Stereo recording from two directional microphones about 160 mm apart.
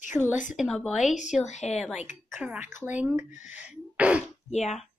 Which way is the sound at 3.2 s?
50° left (ahead or behind).